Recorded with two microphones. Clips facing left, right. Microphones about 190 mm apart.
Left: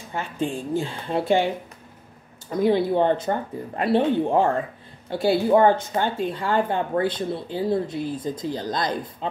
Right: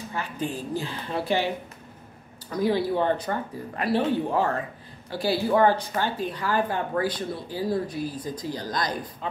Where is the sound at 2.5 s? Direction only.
25° left (ahead or behind).